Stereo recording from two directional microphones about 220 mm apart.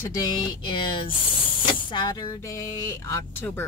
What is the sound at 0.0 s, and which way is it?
Speech, 15° left (ahead or behind).